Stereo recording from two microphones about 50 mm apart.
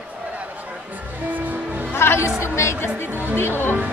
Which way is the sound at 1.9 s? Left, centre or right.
Left.